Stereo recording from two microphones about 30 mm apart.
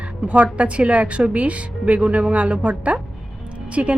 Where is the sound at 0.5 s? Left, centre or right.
Right.